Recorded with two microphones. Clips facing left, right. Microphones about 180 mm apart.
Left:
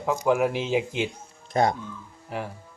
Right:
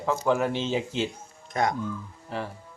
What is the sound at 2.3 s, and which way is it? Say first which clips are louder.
Speech: even; 10° left (ahead or behind).